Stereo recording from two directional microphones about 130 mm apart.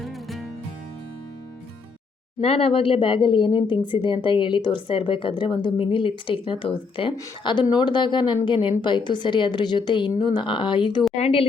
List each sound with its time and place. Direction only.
0.0 s music: centre (ahead or behind)
2.4 s speech: 50° left (ahead or behind)
11.2 s speech: 50° left (ahead or behind)